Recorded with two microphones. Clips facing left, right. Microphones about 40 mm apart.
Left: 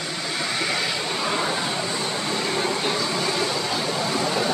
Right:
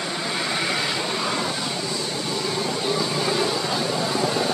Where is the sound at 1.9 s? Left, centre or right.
Left.